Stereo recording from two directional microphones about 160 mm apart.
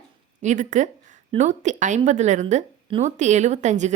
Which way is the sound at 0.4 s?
50° right (ahead or behind).